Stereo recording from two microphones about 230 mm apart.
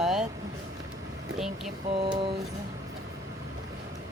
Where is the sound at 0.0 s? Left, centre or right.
Centre.